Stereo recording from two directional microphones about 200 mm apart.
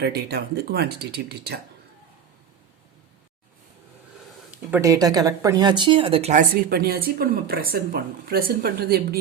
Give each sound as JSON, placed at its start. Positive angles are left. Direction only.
{"t": 0.0, "sound": "speech", "side_deg": -50}
{"t": 4.5, "sound": "speech", "side_deg": -10}
{"t": 6.7, "sound": "speech", "side_deg": -50}